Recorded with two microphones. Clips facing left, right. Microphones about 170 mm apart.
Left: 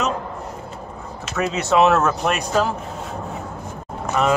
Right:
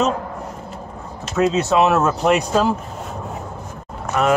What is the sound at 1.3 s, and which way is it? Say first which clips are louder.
Speech: right 3 dB; 20° right (ahead or behind).